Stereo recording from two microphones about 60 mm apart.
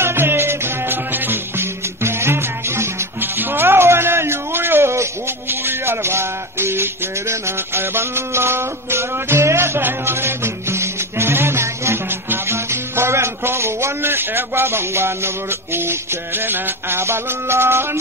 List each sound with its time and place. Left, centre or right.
0.0 s music: right
3.2 s music: right
9.8 s music: right